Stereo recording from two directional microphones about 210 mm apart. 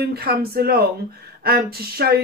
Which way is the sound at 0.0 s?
50° right (ahead or behind).